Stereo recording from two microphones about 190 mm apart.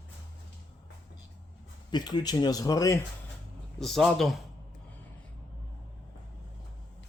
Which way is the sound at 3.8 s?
Centre (ahead or behind).